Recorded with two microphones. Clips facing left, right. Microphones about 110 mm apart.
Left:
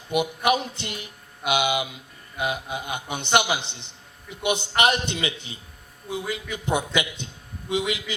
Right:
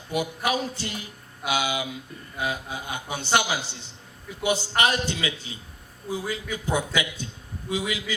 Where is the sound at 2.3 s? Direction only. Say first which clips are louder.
Left 2 dB; 20° left (ahead or behind).